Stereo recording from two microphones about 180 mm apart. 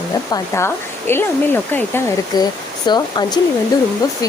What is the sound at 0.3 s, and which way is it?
Speech, 15° left (ahead or behind).